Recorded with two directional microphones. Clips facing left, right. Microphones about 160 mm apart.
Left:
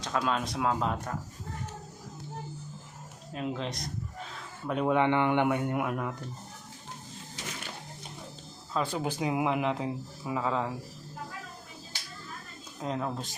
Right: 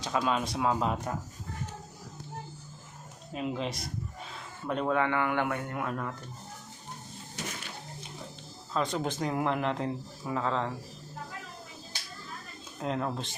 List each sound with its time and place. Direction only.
0.0 s speech: 5° right (ahead or behind)
3.3 s speech: 5° right (ahead or behind)
4.9 s speech: 20° left (ahead or behind)
8.7 s speech: 5° left (ahead or behind)
12.8 s speech: centre (ahead or behind)